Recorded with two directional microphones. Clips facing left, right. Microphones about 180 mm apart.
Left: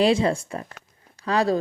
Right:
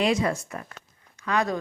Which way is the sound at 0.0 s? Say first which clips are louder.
Left 4 dB; 30° left (ahead or behind).